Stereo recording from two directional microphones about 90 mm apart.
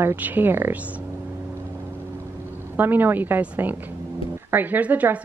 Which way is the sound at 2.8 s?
20° right (ahead or behind).